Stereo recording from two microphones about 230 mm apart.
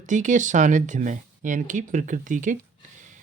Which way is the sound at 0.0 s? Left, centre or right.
Right.